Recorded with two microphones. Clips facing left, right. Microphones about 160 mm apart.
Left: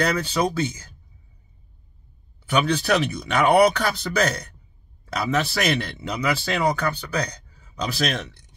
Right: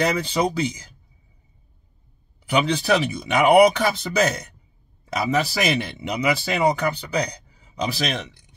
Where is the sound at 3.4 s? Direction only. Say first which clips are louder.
Right 3 dB; 15° right (ahead or behind).